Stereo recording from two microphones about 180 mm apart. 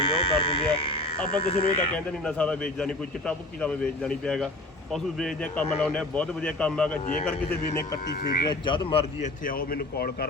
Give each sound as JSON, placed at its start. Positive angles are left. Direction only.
{"t": 0.0, "sound": "a sound", "side_deg": 30}
{"t": 1.5, "sound": "speech", "side_deg": 35}
{"t": 1.9, "sound": "a man's voice", "side_deg": 5}
{"t": 8.1, "sound": "speech", "side_deg": 60}
{"t": 8.4, "sound": "speech", "side_deg": 25}
{"t": 9.4, "sound": "speech", "side_deg": 50}